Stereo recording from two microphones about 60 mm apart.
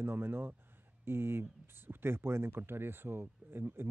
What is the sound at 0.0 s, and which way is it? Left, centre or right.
Speech, right.